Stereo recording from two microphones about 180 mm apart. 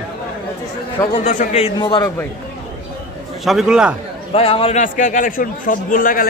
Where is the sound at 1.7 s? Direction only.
20° left (ahead or behind).